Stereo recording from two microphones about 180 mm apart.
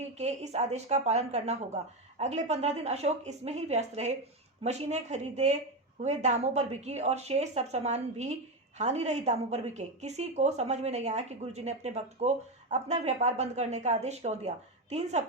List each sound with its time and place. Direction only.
0.2 s a woman's voice: 40° right (ahead or behind)